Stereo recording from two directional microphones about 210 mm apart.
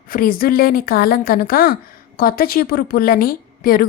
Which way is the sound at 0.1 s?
40° left (ahead or behind).